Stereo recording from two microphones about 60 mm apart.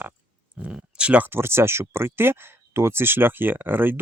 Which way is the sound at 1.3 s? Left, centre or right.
Right.